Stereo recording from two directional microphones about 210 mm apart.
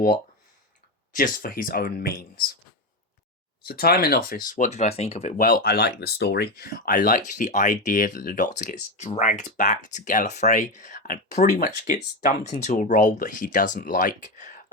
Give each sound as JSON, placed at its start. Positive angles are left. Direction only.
{"t": 1.1, "sound": "speech", "side_deg": 40}
{"t": 3.6, "sound": "speech", "side_deg": 50}